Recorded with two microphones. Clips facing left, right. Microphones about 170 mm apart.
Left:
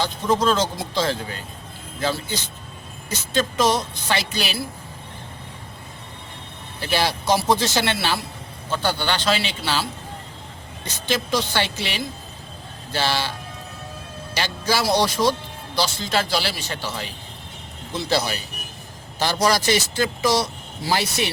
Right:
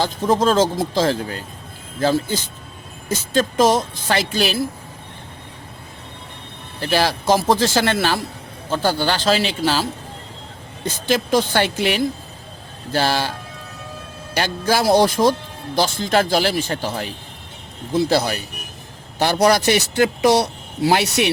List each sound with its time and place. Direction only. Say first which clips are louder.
0.3 s speech: right 6 dB; 45° right (ahead or behind)
6.8 s a man's voice: right 4 dB; 45° right (ahead or behind)
14.3 s a man's voice: right 4 dB; 50° right (ahead or behind); by 21.2 s 70° right (ahead or behind)